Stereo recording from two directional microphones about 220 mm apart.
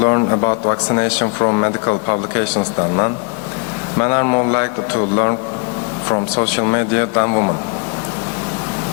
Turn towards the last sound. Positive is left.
turn(degrees=20)  # may be behind; listen again after turning